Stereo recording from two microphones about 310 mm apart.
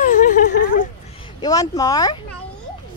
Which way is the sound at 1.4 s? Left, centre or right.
Centre.